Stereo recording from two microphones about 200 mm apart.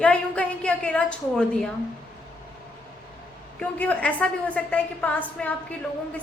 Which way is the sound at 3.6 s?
5° left (ahead or behind).